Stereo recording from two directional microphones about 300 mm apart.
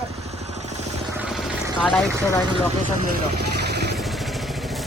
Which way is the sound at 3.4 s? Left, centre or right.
Right.